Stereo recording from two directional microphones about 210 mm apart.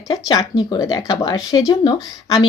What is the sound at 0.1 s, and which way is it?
A woman's voice, 20° left (ahead or behind).